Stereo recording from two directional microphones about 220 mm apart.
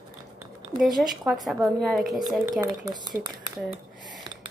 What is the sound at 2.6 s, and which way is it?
Speech, 20° right (ahead or behind).